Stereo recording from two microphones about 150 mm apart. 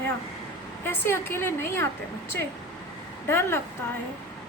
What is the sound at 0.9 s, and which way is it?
A woman's voice, 15° left (ahead or behind).